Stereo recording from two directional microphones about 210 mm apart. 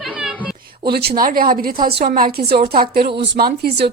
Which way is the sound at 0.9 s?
50° right (ahead or behind).